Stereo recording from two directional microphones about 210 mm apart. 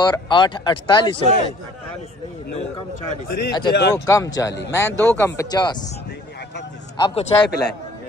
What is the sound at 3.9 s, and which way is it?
Speech, 15° left (ahead or behind).